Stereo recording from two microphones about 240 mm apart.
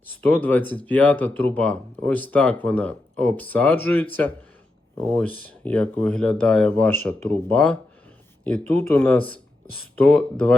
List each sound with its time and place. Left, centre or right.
0.2 s speech: centre